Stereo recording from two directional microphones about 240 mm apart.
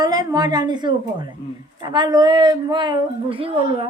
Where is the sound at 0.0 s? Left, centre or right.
Centre.